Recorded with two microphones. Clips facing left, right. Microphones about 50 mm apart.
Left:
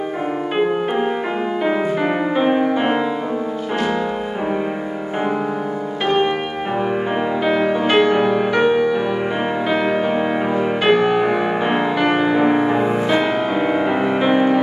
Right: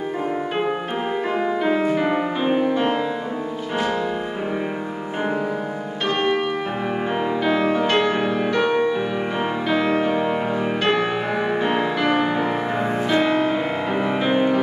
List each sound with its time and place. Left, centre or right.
1.6 s music: centre
6.0 s music: centre
7.4 s music: centre
9.7 s music: centre